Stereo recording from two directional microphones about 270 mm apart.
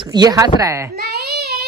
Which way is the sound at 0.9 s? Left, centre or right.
Right.